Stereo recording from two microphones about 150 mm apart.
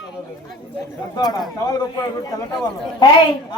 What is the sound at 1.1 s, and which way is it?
A woman's voice, 30° left (ahead or behind).